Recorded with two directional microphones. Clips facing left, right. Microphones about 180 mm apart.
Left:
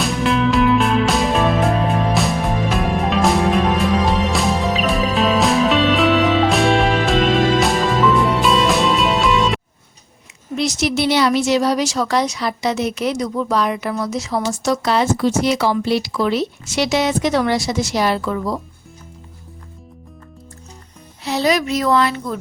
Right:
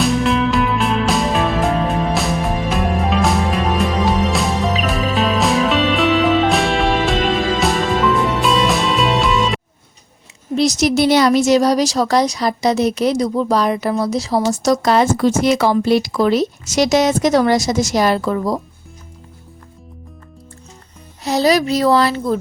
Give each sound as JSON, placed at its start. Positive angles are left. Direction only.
{"t": 0.0, "sound": "music", "side_deg": 0}
{"t": 10.5, "sound": "speech", "side_deg": -35}
{"t": 21.2, "sound": "speech", "side_deg": -35}